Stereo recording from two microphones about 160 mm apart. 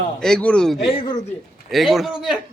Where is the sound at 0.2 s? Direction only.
5° left (ahead or behind).